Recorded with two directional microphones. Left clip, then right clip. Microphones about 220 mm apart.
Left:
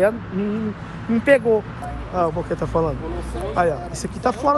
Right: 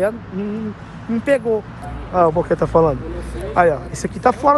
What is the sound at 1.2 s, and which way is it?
Speech, 5° right (ahead or behind).